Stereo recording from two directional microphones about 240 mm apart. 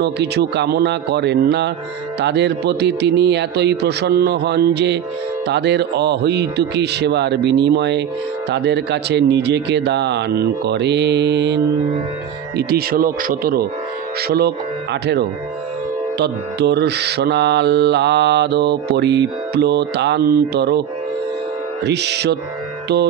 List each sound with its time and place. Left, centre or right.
0.0 s mantra: right
12.5 s speech: right
14.2 s mantra: right
21.8 s mantra: right